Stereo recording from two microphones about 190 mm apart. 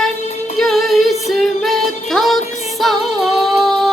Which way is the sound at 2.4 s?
35° left (ahead or behind).